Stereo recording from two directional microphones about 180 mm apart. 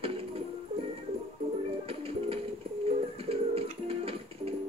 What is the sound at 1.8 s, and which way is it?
Music, 30° right (ahead or behind).